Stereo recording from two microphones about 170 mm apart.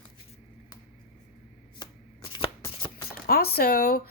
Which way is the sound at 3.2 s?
65° left (ahead or behind).